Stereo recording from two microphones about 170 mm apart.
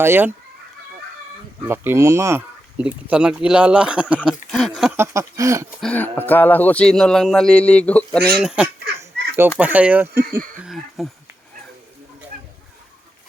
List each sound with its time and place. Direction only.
0.0 s speech: 15° right (ahead or behind)
1.6 s speech: 15° right (ahead or behind)
4.9 s speech: 15° right (ahead or behind)
5.8 s speech: 10° left (ahead or behind); by 10.4 s 15° right (ahead or behind)
10.6 s speech: centre (ahead or behind)